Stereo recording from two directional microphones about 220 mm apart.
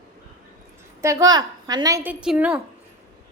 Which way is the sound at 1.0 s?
15° right (ahead or behind).